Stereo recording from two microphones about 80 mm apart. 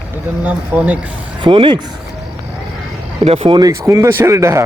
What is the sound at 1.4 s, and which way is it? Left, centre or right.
Speech, right.